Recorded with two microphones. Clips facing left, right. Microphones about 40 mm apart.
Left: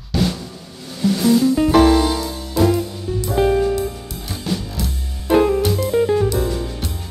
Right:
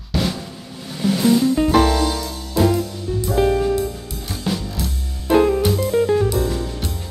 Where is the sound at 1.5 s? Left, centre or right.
Centre.